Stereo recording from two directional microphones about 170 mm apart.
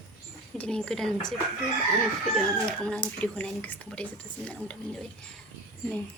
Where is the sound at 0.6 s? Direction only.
5° left (ahead or behind).